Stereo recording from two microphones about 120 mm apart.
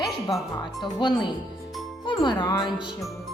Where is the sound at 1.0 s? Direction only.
40° left (ahead or behind).